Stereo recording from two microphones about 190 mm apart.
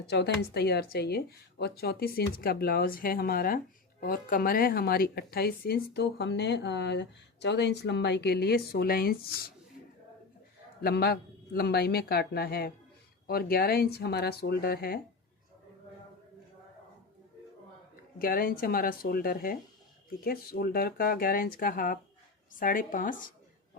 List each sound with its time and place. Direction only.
0.1 s a woman's voice: 60° left (ahead or behind)
10.8 s a woman's voice: 55° left (ahead or behind)
18.2 s speech: 50° left (ahead or behind)